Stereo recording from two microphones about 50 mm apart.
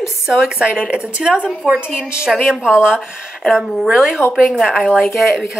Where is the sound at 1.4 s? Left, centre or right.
Left.